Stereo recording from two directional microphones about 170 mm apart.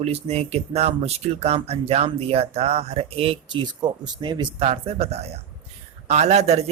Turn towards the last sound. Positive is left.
turn(degrees=-40)  # may be behind; listen again after turning